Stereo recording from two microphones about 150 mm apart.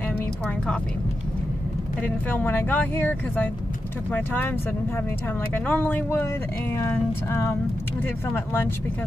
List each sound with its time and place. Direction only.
2.0 s speech: 10° left (ahead or behind)
5.5 s speech: 10° left (ahead or behind)